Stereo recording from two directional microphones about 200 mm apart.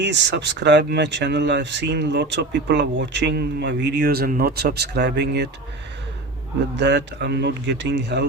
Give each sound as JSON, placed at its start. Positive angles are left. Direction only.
{"t": 0.0, "sound": "speech", "side_deg": -60}
{"t": 6.7, "sound": "speech", "side_deg": -60}